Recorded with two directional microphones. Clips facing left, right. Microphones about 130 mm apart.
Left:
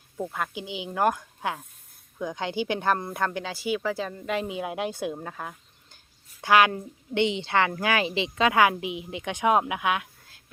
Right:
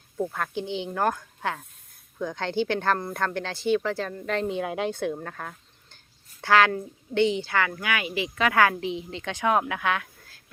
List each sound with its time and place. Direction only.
0.2 s a woman's voice: 5° left (ahead or behind)